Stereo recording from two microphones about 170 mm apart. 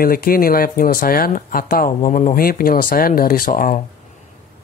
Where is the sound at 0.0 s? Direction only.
60° left (ahead or behind).